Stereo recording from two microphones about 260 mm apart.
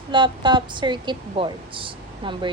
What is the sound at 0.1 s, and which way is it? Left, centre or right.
A woman's voice, centre.